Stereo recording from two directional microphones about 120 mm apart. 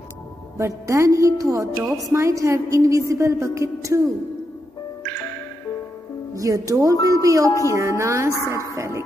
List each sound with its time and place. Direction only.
0.6 s a woman's voice: 25° right (ahead or behind)
6.3 s a woman's voice: 30° right (ahead or behind)
7.4 s a woman's voice: 25° left (ahead or behind)
7.7 s a woman's voice: 25° right (ahead or behind)
8.7 s music: 25° right (ahead or behind)